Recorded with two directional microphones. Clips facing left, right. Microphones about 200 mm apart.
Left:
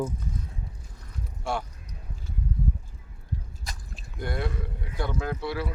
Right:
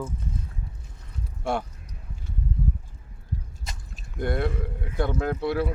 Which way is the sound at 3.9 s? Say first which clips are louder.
Right 5 dB; 55° right (ahead or behind).